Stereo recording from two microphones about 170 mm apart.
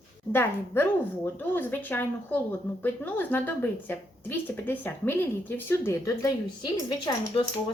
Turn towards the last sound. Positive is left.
turn(degrees=30)  # may be behind; listen again after turning